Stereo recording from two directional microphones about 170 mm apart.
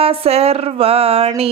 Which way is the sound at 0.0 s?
35° right (ahead or behind).